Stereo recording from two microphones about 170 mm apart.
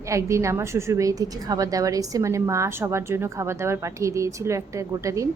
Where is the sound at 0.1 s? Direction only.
15° right (ahead or behind).